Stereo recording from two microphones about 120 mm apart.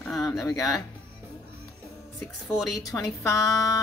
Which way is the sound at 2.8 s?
30° left (ahead or behind).